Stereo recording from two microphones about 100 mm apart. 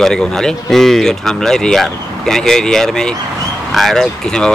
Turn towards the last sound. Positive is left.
turn(degrees=5)  # may be behind; listen again after turning